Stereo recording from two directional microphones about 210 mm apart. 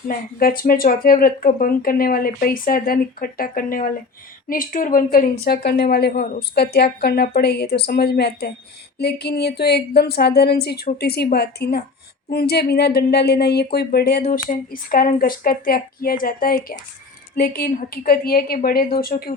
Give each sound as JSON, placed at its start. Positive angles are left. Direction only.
{"t": 0.1, "sound": "a woman's voice", "side_deg": 45}